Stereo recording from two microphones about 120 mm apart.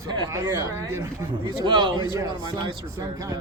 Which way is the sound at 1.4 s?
40° right (ahead or behind).